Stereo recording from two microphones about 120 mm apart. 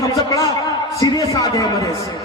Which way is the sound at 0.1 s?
30° left (ahead or behind).